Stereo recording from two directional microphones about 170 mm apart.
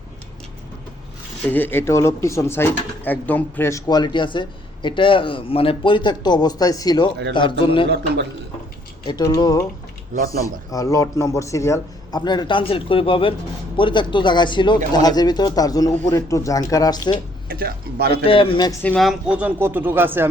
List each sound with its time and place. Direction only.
1.5 s a man's voice: 10° left (ahead or behind); by 7.9 s 30° left (ahead or behind)
7.9 s a man's voice: 75° right (ahead or behind)
9.0 s speech: 25° left (ahead or behind)
17.5 s a man's voice: 60° right (ahead or behind)
18.1 s a man's voice: 30° left (ahead or behind)
18.8 s speech: 10° left (ahead or behind)
19.0 s speech: 5° right (ahead or behind)